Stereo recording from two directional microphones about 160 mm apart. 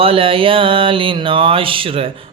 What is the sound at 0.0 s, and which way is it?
Mantra, 35° right (ahead or behind).